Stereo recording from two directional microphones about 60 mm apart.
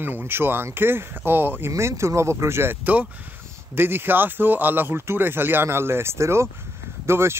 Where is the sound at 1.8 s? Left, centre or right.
Right.